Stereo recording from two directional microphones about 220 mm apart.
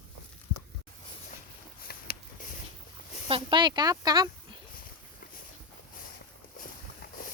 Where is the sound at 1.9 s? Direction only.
40° left (ahead or behind).